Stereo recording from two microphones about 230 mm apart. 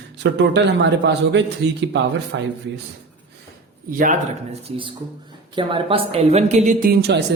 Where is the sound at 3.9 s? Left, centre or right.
Right.